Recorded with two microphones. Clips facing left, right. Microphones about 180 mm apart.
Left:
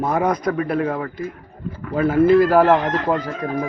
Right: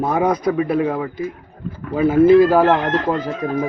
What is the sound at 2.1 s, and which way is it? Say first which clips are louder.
Chicken: right 3 dB; 25° right (ahead or behind).